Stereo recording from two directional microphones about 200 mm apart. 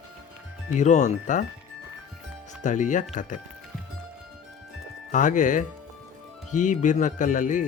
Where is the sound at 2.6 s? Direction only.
40° left (ahead or behind).